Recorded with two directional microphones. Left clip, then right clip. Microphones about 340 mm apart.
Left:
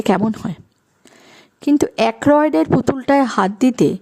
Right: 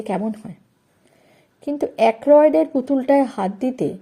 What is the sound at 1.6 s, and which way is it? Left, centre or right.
Speech, left.